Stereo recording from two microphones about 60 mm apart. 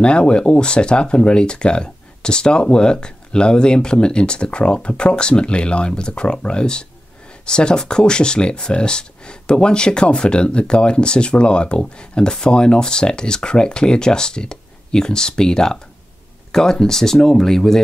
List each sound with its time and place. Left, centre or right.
0.0 s speech: centre